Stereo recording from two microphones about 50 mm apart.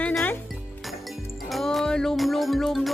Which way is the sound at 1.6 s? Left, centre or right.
Centre.